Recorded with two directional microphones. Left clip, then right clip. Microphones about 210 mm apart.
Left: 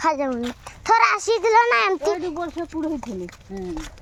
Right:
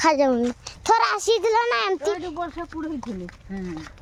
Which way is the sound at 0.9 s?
15° right (ahead or behind).